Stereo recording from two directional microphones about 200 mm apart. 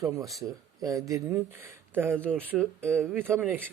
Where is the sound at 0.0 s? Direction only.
15° right (ahead or behind).